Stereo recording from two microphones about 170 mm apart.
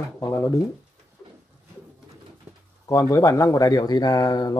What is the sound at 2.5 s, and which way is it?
Pigeon, 10° right (ahead or behind).